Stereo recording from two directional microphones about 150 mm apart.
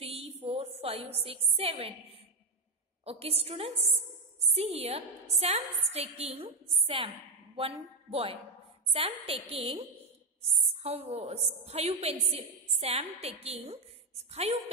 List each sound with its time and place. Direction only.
0.0 s a sound: 40° right (ahead or behind)
1.6 s a woman's voice: 40° right (ahead or behind)
7.5 s a woman's voice: 40° right (ahead or behind)